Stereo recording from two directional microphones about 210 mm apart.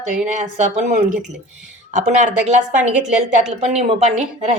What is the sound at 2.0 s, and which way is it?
A woman's voice, 35° right (ahead or behind).